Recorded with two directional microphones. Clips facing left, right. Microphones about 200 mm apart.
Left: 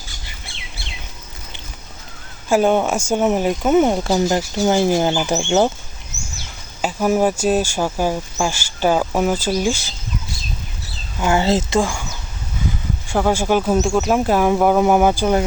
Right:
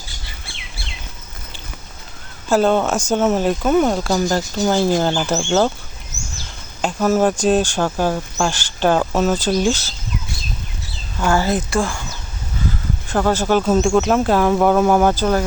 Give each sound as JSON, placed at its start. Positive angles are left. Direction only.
{"t": 2.5, "sound": "speech", "side_deg": 15}
{"t": 4.3, "sound": "speech", "side_deg": 10}
{"t": 6.8, "sound": "speech", "side_deg": 10}
{"t": 11.2, "sound": "speech", "side_deg": 20}
{"t": 13.1, "sound": "speech", "side_deg": 10}